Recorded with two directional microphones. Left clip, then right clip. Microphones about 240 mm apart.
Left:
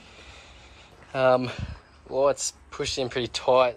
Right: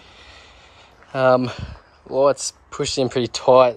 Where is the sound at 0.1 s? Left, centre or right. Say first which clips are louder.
Right 2 dB; centre.